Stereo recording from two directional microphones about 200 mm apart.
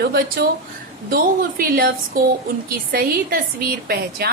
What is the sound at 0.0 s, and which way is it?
A woman's voice, 50° right (ahead or behind).